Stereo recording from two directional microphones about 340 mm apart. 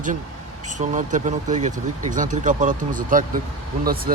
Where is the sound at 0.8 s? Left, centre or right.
Right.